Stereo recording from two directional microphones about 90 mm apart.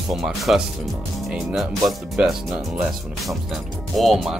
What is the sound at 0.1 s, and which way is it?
Speech, centre (ahead or behind).